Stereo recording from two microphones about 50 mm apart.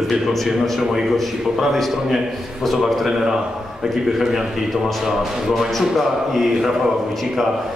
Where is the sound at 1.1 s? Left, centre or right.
Centre.